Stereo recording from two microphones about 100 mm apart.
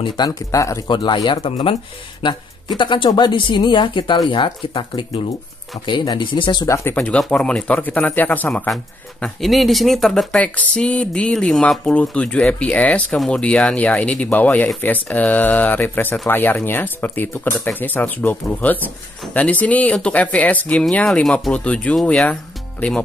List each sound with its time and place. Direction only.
0.0 s speech: 40° left (ahead or behind)
0.8 s speech: 50° left (ahead or behind)
2.8 s speech: 55° left (ahead or behind)
6.6 s speech: 25° left (ahead or behind)
7.0 s speech: 10° left (ahead or behind)
9.2 s speech: centre (ahead or behind)
10.4 s speech: 15° left (ahead or behind)